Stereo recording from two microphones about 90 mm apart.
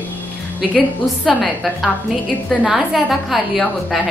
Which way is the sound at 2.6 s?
15° right (ahead or behind).